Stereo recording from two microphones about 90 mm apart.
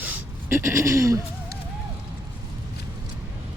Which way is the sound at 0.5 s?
30° right (ahead or behind).